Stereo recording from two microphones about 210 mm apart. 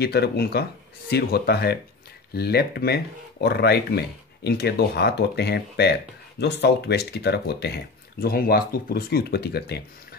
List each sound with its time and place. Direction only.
0.0 s speech: 50° left (ahead or behind)